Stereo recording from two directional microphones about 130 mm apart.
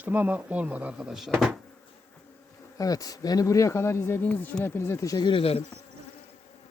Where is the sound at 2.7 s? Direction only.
30° left (ahead or behind).